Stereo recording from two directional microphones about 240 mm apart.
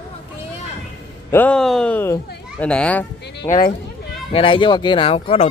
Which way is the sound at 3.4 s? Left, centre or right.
Left.